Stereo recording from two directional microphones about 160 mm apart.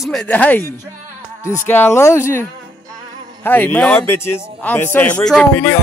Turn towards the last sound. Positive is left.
turn(degrees=10)  # may be behind; listen again after turning